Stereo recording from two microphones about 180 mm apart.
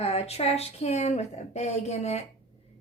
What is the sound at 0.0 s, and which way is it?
A woman's voice, 35° left (ahead or behind).